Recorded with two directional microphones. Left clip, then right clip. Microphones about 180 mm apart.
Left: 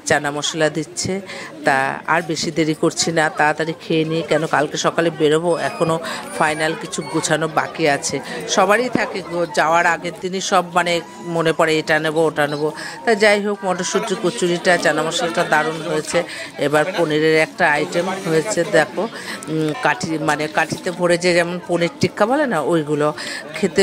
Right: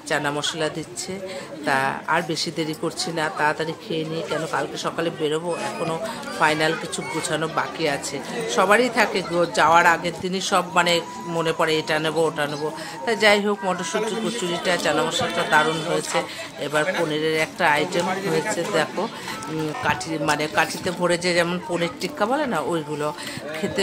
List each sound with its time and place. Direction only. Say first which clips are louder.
0.1 s speech: left 5 dB; 35° left (ahead or behind)
6.4 s speech: left 1 dB; 40° left (ahead or behind)